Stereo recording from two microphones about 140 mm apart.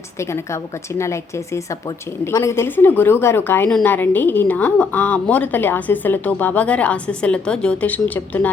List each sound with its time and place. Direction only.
0.9 s a woman's voice: 20° left (ahead or behind)